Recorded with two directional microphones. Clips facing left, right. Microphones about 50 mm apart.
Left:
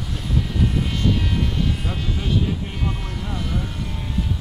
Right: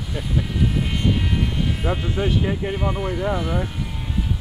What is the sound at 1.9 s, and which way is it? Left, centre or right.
Speech, right.